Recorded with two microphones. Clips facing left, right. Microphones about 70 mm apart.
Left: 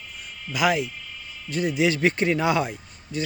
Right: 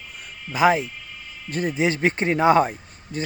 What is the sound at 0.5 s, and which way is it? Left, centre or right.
A man's voice, right.